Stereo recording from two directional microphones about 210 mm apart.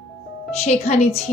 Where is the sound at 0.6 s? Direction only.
35° left (ahead or behind).